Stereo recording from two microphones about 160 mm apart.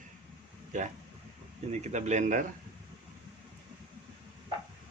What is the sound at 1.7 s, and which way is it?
Speech, 45° right (ahead or behind).